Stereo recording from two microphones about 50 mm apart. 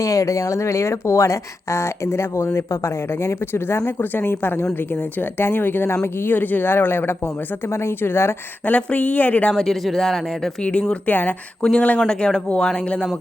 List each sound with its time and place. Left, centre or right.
0.0 s speech: left
3.5 s speech: left
7.7 s a woman's voice: left
8.6 s speech: left
9.5 s speech: centre
10.6 s speech: left
11.1 s speech: left
11.6 s speech: left